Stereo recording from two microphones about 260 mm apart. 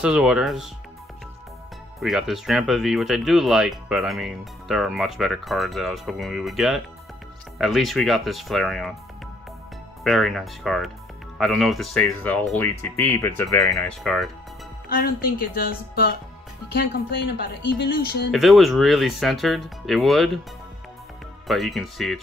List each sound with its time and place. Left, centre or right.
0.0 s speech: centre
2.0 s speech: centre
10.0 s speech: centre
14.9 s speech: left
18.3 s speech: centre
21.5 s speech: centre